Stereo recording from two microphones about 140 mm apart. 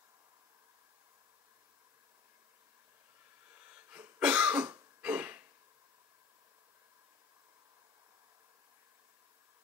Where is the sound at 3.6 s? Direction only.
15° right (ahead or behind).